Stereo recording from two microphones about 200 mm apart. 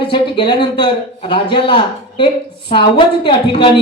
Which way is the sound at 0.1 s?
25° left (ahead or behind).